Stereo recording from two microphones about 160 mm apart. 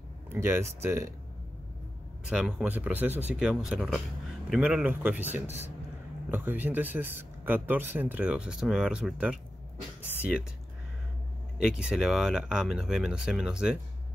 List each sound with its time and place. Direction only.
0.3 s speech: 15° right (ahead or behind)
2.2 s speech: 5° right (ahead or behind)
6.3 s speech: 10° right (ahead or behind)
10.0 s a sound: 10° right (ahead or behind)
11.5 s speech: 5° right (ahead or behind)